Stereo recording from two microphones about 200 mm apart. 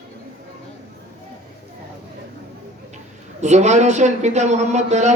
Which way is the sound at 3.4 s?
35° right (ahead or behind).